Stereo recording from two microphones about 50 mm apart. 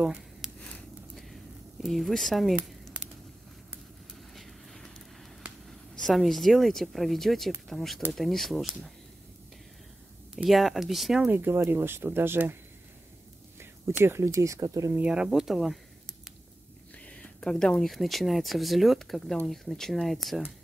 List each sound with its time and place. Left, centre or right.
0.4 s a sound: centre
4.1 s vehicle: centre
5.7 s speech: centre
10.3 s speech: centre
11.2 s speech: right
13.9 s speech: right
14.2 s speech: right
15.0 s speech: centre
17.0 s a sound: left
17.4 s speech: centre
17.8 s speech: centre